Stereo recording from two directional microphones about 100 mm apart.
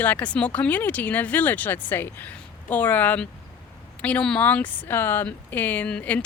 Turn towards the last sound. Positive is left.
turn(degrees=10)  # may be behind; listen again after turning